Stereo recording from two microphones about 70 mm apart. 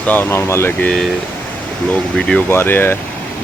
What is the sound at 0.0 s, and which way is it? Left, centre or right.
Speech, left.